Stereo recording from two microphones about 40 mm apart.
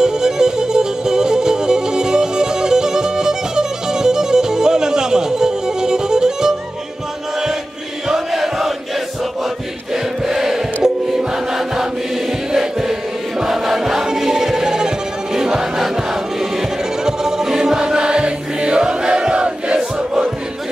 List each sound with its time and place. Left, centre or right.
0.0 s music: centre
8.1 s chant: centre
9.9 s music: centre